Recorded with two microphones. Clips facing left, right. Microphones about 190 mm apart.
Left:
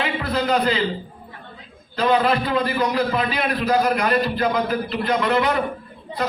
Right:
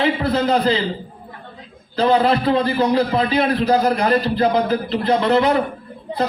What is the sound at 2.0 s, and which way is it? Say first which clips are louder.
A man's voice: right 3 dB; 30° right (ahead or behind).